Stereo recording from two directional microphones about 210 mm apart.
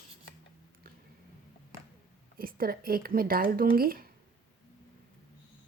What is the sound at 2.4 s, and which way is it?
Speech, 45° right (ahead or behind).